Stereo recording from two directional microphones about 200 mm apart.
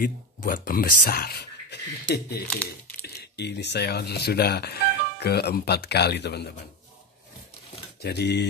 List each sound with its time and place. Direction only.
0.0 s speech: 45° left (ahead or behind)
8.0 s speech: 55° left (ahead or behind)